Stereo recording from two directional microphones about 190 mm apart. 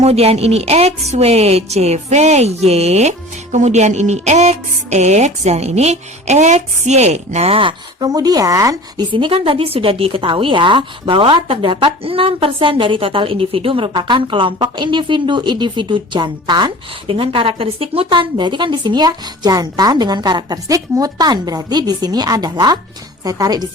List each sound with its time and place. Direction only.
0.0 s speech: 35° right (ahead or behind)